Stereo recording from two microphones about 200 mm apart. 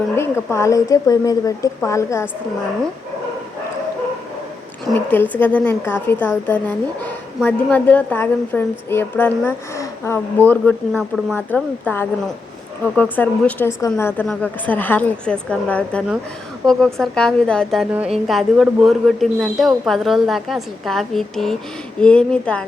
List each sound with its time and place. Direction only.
0.2 s a woman's voice: 15° left (ahead or behind)
4.9 s a woman's voice: 10° left (ahead or behind)